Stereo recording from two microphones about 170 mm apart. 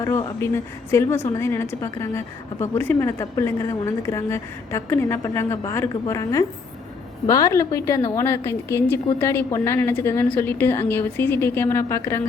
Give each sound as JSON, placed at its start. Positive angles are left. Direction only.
{"t": 0.0, "sound": "a woman's voice", "side_deg": 20}